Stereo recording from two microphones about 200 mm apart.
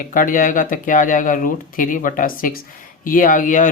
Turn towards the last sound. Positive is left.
turn(degrees=40)  # may be behind; listen again after turning